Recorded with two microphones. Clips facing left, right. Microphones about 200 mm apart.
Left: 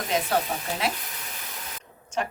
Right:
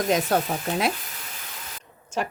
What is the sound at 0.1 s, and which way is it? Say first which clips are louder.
Speech: right 3 dB; 45° right (ahead or behind).